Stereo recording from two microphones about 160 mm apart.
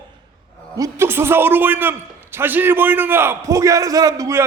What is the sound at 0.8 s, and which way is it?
A man's voice, 20° right (ahead or behind).